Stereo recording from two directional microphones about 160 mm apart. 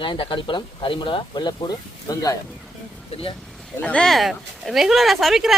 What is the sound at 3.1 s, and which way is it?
Speech, 40° left (ahead or behind).